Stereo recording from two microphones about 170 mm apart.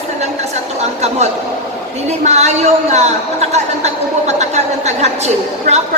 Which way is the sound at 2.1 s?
40° right (ahead or behind).